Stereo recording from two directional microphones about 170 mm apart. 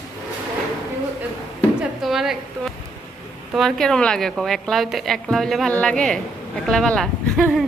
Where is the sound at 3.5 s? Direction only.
Centre (ahead or behind).